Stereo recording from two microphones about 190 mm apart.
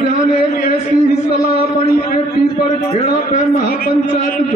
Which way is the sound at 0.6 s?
40° left (ahead or behind).